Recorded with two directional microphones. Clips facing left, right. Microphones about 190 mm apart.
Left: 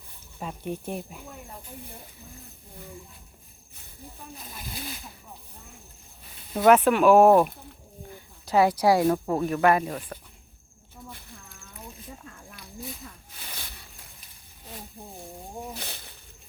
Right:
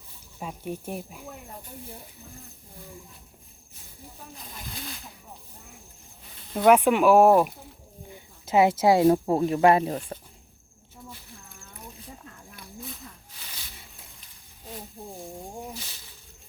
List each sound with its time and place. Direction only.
0.3 s speech: 10° right (ahead or behind)
6.6 s speech: 15° right (ahead or behind)
8.1 s speech: 20° right (ahead or behind)
15.7 s snake: 60° left (ahead or behind)